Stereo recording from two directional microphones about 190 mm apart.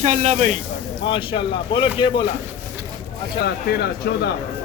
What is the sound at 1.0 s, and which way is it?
Speech, 25° left (ahead or behind).